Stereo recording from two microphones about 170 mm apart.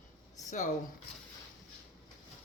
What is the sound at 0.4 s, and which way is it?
Speech, 45° left (ahead or behind).